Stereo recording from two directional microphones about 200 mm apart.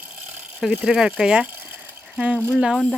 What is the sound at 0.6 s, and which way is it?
Speech, 5° right (ahead or behind).